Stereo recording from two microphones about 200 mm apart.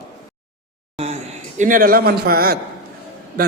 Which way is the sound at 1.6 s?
45° right (ahead or behind).